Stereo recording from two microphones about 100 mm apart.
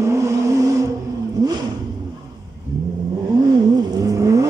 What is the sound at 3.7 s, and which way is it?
Vehicle, 40° right (ahead or behind).